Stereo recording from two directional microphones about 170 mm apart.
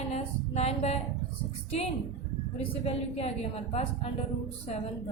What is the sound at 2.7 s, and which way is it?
A woman's voice, 35° left (ahead or behind).